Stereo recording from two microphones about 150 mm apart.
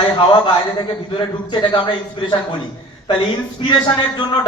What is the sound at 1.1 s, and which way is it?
Speech, 35° left (ahead or behind).